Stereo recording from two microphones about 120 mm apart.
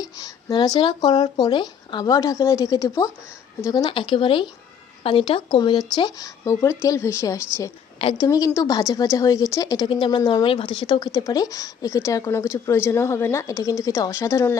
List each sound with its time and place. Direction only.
0.0 s a woman's voice: 30° left (ahead or behind)
3.8 s a woman's voice: 45° left (ahead or behind); by 14.5 s 20° left (ahead or behind)